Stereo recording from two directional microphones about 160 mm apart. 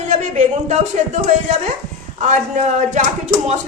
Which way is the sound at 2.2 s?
50° right (ahead or behind).